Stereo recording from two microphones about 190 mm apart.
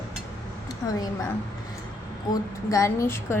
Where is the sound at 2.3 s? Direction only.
15° left (ahead or behind).